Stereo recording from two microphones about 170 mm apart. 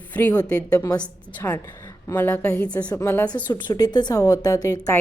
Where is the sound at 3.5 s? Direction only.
25° left (ahead or behind).